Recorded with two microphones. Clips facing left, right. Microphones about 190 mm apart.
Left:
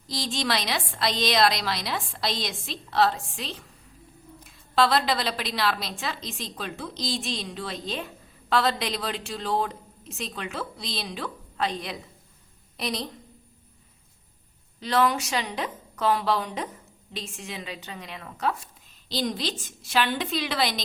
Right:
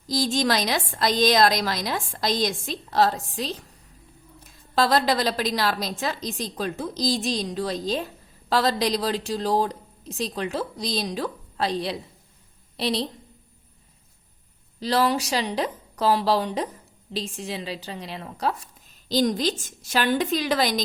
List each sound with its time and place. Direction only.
0.1 s a woman's voice: 40° right (ahead or behind)
14.8 s a woman's voice: 35° right (ahead or behind)
19.0 s a woman's voice: 45° right (ahead or behind)